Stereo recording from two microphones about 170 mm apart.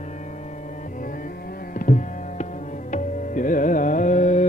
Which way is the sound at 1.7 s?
45° left (ahead or behind).